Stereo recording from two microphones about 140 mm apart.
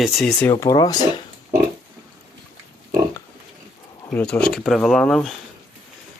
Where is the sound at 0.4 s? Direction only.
20° left (ahead or behind).